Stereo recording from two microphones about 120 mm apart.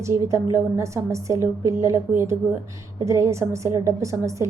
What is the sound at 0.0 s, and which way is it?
A woman's voice, 25° right (ahead or behind).